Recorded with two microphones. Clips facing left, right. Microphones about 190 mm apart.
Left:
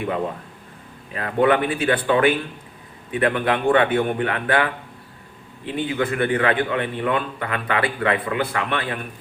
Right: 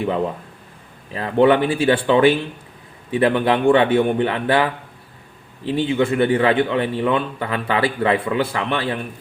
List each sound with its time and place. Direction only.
1.1 s a man's voice: 25° right (ahead or behind)